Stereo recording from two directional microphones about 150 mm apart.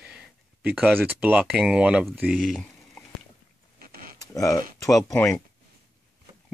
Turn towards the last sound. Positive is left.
turn(degrees=20)  # may be behind; listen again after turning